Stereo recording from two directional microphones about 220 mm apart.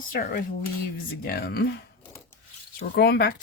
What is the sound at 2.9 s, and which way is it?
Speech, 45° left (ahead or behind).